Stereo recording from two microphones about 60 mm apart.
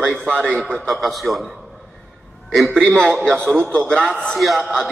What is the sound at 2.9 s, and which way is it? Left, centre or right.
A man's voice, centre.